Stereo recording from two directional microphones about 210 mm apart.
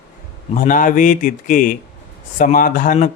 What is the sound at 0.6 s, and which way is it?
Speech, 40° left (ahead or behind).